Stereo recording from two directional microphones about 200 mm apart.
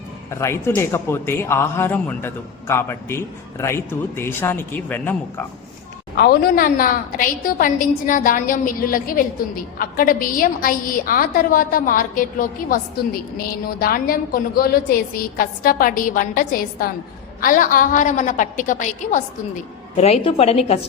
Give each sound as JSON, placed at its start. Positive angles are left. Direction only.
{"t": 0.3, "sound": "a man's voice", "side_deg": 15}
{"t": 6.1, "sound": "a woman's voice", "side_deg": 50}